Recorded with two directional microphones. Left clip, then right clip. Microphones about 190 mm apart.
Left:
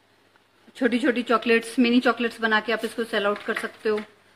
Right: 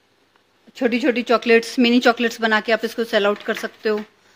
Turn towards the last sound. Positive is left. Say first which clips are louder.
# right 3 dB
turn(degrees=-40)  # may be behind; listen again after turning